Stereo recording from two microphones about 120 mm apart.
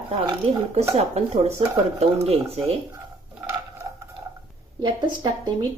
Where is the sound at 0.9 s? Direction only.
60° right (ahead or behind).